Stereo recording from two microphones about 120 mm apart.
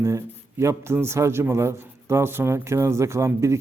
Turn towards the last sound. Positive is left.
turn(degrees=-25)  # may be behind; listen again after turning